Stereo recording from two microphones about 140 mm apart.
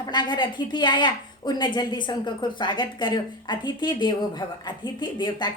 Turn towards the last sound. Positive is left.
turn(degrees=35)  # may be behind; listen again after turning